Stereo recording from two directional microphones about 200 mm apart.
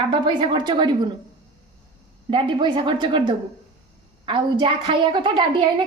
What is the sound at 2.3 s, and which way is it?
A woman's voice, 25° right (ahead or behind).